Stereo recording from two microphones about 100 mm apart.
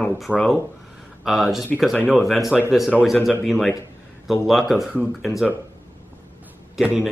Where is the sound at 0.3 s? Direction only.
Centre (ahead or behind).